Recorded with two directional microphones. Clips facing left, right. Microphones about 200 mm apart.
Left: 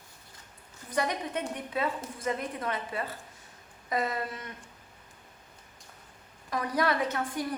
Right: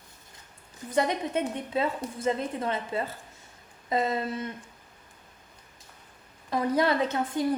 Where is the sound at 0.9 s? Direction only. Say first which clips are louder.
Right 4 dB; 25° right (ahead or behind).